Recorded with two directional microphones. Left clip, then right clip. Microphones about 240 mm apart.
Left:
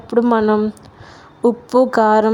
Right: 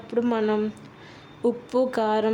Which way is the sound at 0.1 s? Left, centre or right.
Left.